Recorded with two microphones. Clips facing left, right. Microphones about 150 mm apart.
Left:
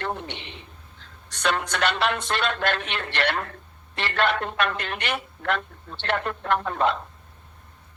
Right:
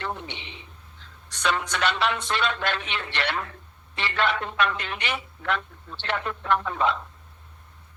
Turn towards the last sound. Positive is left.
turn(degrees=50)  # may be behind; listen again after turning